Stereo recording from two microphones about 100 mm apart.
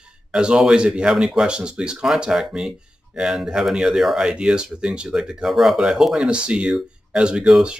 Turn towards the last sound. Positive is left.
turn(degrees=-10)  # may be behind; listen again after turning